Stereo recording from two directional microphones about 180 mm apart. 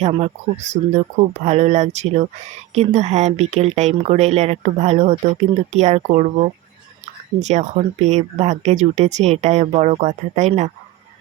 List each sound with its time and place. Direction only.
0.0 s speech: 35° right (ahead or behind)